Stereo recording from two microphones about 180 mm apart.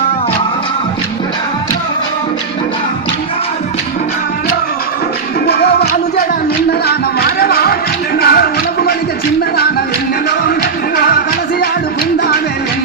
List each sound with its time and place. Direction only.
5.5 s music: 60° left (ahead or behind)